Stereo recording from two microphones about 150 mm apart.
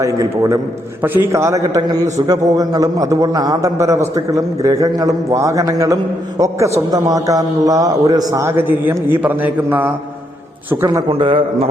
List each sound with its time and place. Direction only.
0.0 s a man's voice: 20° right (ahead or behind)
11.1 s a man's voice: 35° right (ahead or behind)